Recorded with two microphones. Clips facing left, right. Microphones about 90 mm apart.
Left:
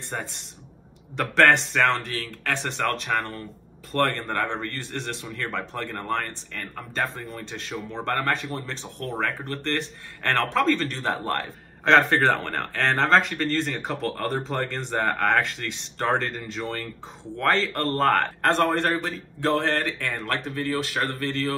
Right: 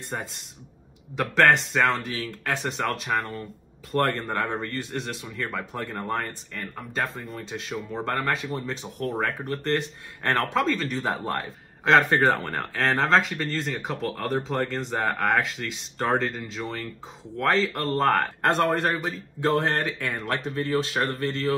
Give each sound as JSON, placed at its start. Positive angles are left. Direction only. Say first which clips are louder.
{"t": 0.1, "sound": "speech", "louder": "left 1 dB", "side_deg": -5}
{"t": 19.5, "sound": "speech", "louder": "left 1 dB", "side_deg": -15}